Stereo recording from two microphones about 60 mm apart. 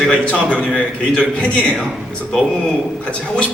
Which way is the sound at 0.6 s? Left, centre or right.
Centre.